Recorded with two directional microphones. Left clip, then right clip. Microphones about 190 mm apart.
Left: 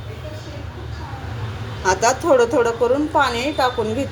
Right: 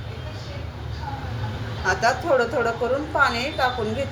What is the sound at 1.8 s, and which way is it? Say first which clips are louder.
A woman's voice: left 4 dB; 50° left (ahead or behind).